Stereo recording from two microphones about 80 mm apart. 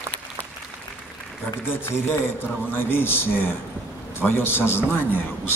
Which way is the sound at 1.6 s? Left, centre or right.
Left.